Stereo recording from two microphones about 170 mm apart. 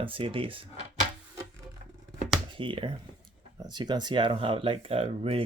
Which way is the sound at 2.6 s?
30° right (ahead or behind).